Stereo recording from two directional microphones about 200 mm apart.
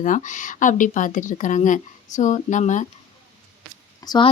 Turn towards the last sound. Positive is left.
turn(degrees=20)  # may be behind; listen again after turning